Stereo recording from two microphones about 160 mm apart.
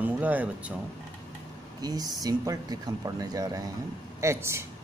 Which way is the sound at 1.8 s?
25° right (ahead or behind).